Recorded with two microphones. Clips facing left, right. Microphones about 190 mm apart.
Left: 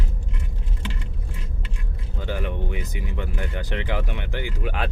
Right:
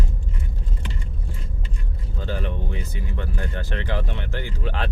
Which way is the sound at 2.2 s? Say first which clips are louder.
Left 1 dB; 15° left (ahead or behind).